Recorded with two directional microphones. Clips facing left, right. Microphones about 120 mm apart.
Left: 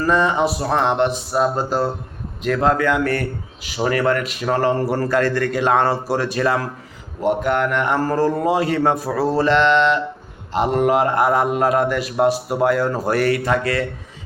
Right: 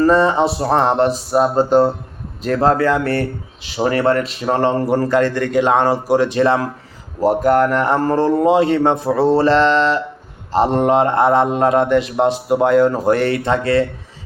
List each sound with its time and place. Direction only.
0.0 s speech: 30° right (ahead or behind)
1.3 s speech: 25° right (ahead or behind)
7.2 s speech: 40° right (ahead or behind)